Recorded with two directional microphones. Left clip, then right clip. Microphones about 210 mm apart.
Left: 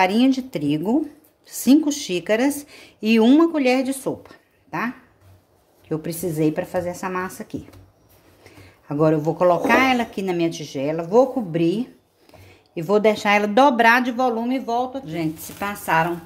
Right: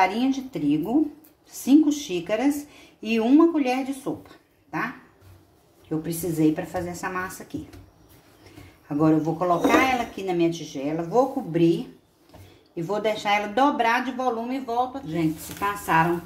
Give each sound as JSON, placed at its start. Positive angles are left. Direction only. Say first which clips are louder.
{"t": 0.0, "sound": "a woman's voice", "louder": "left 4 dB", "side_deg": 55}
{"t": 8.8, "sound": "speech", "louder": "left 3 dB", "side_deg": 45}
{"t": 12.7, "sound": "speech", "louder": "left 7 dB", "side_deg": 50}